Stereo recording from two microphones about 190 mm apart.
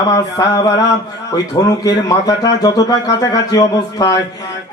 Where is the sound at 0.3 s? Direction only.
20° left (ahead or behind).